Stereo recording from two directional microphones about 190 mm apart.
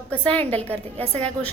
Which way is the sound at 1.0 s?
35° right (ahead or behind).